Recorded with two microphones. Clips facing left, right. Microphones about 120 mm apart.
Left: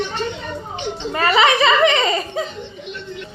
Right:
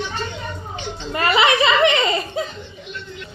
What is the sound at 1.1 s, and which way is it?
Laughter, 35° left (ahead or behind).